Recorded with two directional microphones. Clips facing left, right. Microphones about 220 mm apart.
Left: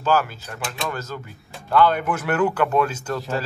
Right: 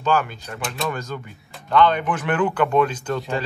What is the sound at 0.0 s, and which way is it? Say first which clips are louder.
Speech: even; 5° left (ahead or behind).